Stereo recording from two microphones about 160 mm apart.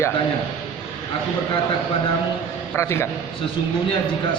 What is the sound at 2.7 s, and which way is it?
Speech, 15° left (ahead or behind).